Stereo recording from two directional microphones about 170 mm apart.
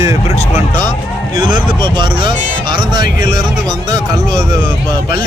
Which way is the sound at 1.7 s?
25° right (ahead or behind).